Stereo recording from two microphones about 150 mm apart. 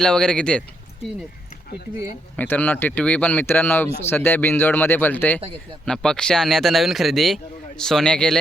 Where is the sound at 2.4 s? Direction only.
10° left (ahead or behind).